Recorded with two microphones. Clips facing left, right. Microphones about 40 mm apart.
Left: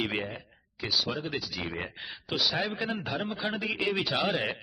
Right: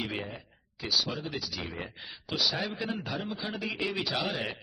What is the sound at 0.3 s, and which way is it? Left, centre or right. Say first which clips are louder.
A man's voice: left 3 dB; left.